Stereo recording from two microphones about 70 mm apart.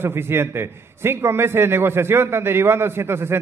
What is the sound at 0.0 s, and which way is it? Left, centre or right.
A man's voice, right.